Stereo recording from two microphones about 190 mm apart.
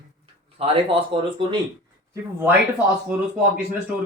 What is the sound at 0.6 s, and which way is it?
Speech, 30° right (ahead or behind).